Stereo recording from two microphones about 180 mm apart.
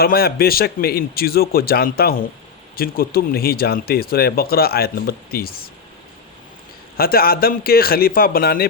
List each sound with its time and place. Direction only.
0.0 s speech: 60° left (ahead or behind)
6.9 s speech: 55° left (ahead or behind)